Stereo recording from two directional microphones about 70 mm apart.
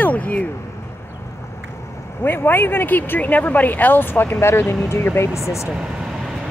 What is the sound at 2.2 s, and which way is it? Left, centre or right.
Speech, left.